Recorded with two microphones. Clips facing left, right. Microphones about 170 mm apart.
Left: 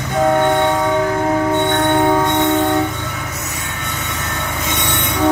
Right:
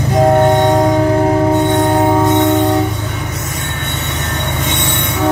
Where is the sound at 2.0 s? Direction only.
10° right (ahead or behind).